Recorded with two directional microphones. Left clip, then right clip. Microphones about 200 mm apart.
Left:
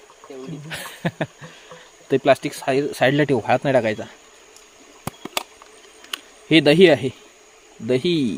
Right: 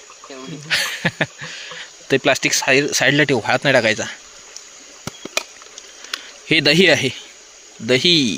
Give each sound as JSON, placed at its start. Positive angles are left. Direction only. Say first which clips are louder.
{"t": 0.7, "sound": "speech", "louder": "right 11 dB", "side_deg": 0}
{"t": 6.5, "sound": "a man's voice", "louder": "even", "side_deg": 0}